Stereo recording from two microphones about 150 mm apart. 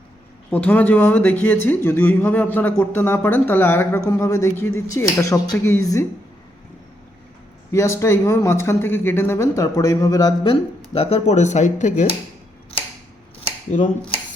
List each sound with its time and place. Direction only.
0.5 s speech: 10° left (ahead or behind)
7.7 s speech: 20° left (ahead or behind); by 12.0 s 55° left (ahead or behind)
13.7 s speech: 55° left (ahead or behind)